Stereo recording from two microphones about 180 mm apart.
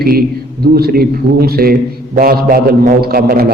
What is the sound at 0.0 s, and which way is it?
A man's voice, 60° right (ahead or behind).